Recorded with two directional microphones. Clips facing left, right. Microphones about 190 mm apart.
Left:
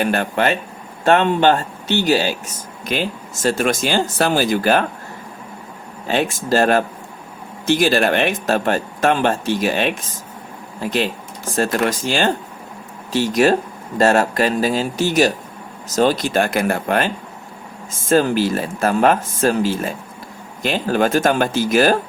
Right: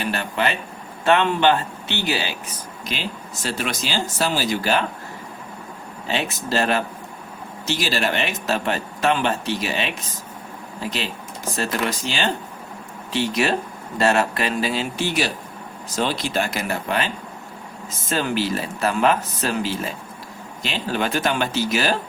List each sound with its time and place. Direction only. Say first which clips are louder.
0.0 s speech: left 6 dB; 50° left (ahead or behind)
6.1 s speech: left 6 dB; 50° left (ahead or behind)